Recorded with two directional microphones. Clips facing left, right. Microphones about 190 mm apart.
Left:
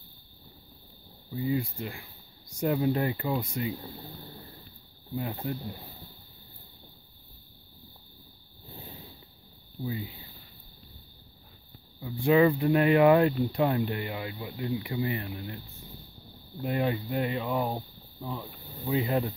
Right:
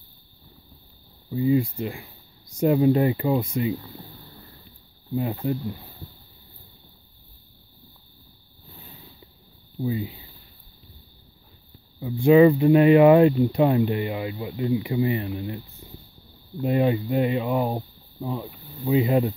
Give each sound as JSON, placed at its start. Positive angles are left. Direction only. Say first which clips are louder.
{"t": 1.3, "sound": "speech", "louder": "right 8 dB", "side_deg": -20}
{"t": 5.1, "sound": "speech", "louder": "right 7 dB", "side_deg": -20}
{"t": 9.8, "sound": "speech", "louder": "right 8 dB", "side_deg": -20}
{"t": 12.0, "sound": "speech", "louder": "right 7 dB", "side_deg": -20}
{"t": 16.6, "sound": "speech", "louder": "right 7 dB", "side_deg": -20}